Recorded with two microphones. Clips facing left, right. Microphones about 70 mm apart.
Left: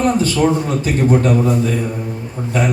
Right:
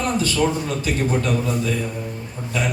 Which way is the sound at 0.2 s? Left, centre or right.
Left.